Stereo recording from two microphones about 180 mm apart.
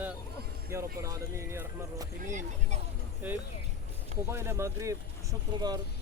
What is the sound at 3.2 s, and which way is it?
Speech, 10° right (ahead or behind).